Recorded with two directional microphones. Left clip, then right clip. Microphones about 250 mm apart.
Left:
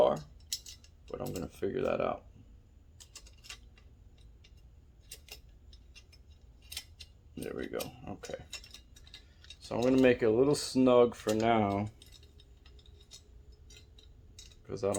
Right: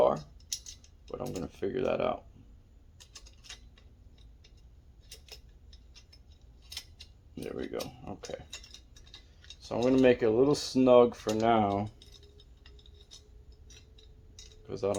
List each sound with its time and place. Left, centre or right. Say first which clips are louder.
0.0 s cutlery: right 1 dB; centre
1.0 s speech: right 2 dB; centre
3.0 s tick-tock: right 1 dB; centre
5.1 s mechanisms: even; centre
6.7 s cutlery: right 1 dB; centre
9.6 s speech: right 2 dB; centre
11.9 s chink: right 2 dB; centre
13.7 s a sound: right 1 dB; centre
14.5 s cutlery: right 1 dB; centre